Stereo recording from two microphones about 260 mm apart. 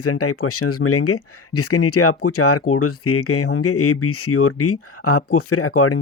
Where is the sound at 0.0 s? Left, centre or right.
Left.